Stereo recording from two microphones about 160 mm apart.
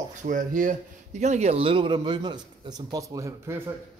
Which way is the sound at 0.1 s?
55° right (ahead or behind).